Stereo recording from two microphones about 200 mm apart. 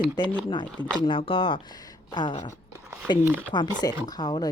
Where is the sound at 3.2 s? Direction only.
10° right (ahead or behind).